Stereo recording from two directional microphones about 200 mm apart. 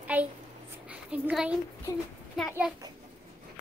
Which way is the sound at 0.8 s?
5° right (ahead or behind).